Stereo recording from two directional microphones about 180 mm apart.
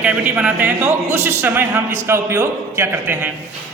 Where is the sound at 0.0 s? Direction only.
5° right (ahead or behind).